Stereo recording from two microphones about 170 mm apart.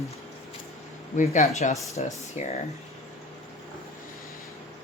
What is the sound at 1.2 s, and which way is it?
A woman's voice, 45° left (ahead or behind).